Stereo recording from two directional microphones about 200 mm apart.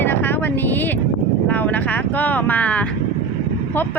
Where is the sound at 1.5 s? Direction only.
10° left (ahead or behind).